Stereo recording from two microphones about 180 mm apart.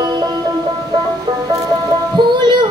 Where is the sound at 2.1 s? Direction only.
25° right (ahead or behind).